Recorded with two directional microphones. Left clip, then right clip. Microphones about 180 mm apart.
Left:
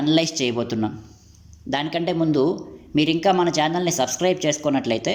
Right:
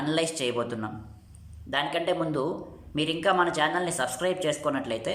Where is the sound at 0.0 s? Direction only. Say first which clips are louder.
Left 7 dB; 20° left (ahead or behind).